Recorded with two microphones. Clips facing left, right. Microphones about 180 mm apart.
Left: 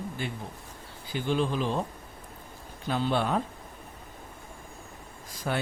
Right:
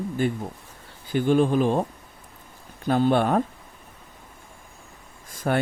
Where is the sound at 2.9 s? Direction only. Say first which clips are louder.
Right 7 dB; 50° right (ahead or behind).